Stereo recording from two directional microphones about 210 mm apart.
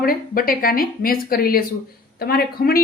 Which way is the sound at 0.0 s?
45° left (ahead or behind).